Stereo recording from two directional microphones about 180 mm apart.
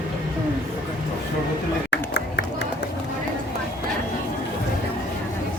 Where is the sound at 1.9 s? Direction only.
70° left (ahead or behind).